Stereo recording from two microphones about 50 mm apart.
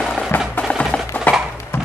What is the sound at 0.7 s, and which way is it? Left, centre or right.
Music, left.